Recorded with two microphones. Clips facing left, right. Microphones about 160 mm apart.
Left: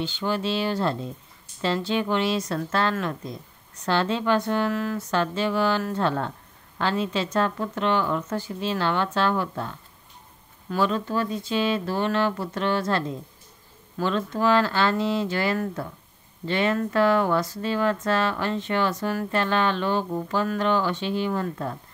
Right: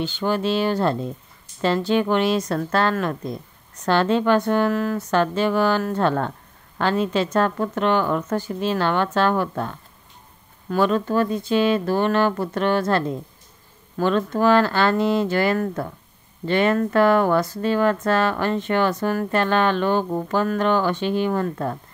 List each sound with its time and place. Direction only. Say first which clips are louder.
0.0 s speech: right 4 dB; 55° right (ahead or behind)